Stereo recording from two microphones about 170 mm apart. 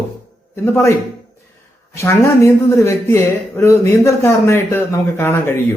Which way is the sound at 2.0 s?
15° left (ahead or behind).